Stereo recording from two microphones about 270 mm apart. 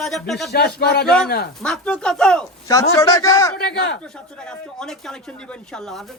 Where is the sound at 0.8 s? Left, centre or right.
Left.